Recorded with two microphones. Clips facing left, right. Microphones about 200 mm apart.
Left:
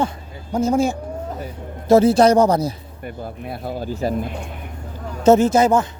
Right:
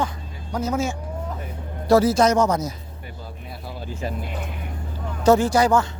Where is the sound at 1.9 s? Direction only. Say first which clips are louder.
Left 4 dB; 25° left (ahead or behind).